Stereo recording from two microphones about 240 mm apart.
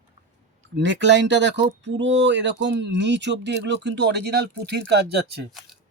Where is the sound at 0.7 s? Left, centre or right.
Right.